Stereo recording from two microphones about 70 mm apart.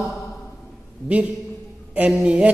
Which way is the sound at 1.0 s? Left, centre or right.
Centre.